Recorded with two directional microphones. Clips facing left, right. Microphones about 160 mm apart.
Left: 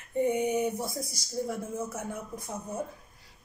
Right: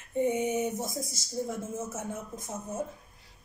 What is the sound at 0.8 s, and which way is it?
Speech, 25° right (ahead or behind).